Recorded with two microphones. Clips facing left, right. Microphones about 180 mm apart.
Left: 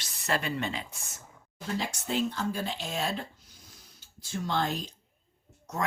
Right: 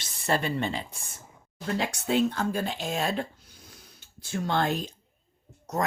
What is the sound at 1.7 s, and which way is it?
Speech, 65° right (ahead or behind).